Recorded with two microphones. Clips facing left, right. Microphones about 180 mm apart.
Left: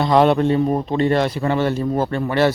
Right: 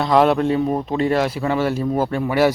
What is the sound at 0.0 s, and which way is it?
Speech, centre (ahead or behind).